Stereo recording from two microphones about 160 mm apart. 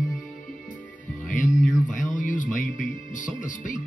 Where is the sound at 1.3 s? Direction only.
50° left (ahead or behind).